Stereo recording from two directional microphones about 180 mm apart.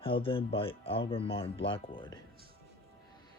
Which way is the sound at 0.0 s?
30° left (ahead or behind).